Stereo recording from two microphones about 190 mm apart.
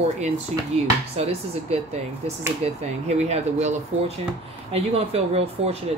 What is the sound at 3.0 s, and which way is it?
Speech, 35° right (ahead or behind).